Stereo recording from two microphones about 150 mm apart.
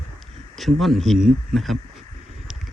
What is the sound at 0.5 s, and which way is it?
Speech, centre (ahead or behind).